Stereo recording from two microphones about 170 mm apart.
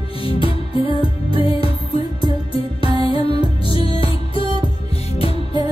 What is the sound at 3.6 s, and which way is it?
Music, 35° left (ahead or behind).